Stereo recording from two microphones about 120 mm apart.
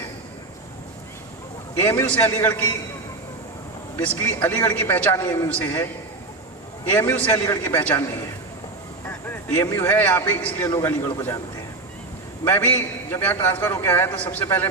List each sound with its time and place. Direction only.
1.8 s a man's voice: 20° left (ahead or behind)
4.2 s a man's voice: 20° left (ahead or behind)
5.1 s a man's voice: 25° left (ahead or behind)
9.0 s a man's voice: 15° left (ahead or behind)
12.5 s a man's voice: 15° left (ahead or behind)